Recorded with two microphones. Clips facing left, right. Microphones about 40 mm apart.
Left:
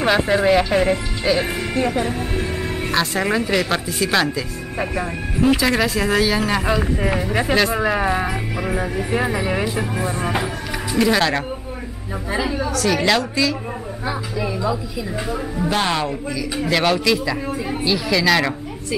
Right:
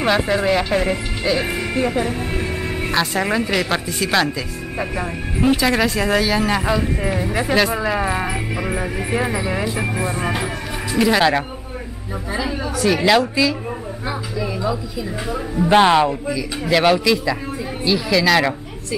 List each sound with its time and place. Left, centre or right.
0.0 s speech: centre
9.2 s a woman's voice: centre
12.3 s a woman's voice: centre
12.5 s a woman's voice: centre
15.2 s speech: centre
15.7 s a woman's voice: centre
16.6 s speech: centre